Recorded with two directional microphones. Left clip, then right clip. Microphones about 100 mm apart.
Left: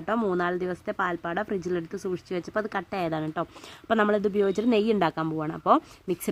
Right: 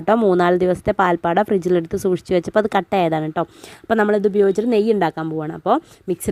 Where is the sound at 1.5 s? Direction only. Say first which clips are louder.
Right 12 dB; 90° right.